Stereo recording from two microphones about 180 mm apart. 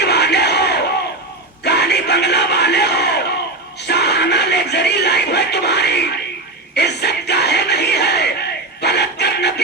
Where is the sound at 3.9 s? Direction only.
65° left (ahead or behind).